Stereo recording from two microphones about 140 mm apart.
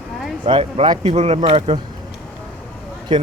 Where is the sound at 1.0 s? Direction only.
50° right (ahead or behind).